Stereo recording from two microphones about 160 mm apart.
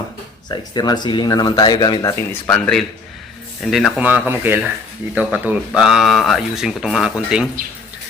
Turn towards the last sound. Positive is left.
turn(degrees=-5)  # may be behind; listen again after turning